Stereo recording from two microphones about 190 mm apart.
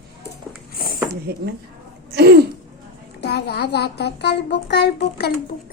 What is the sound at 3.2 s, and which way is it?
A child's voice, 60° left (ahead or behind).